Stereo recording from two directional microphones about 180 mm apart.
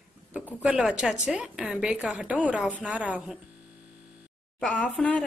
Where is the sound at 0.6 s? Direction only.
5° right (ahead or behind).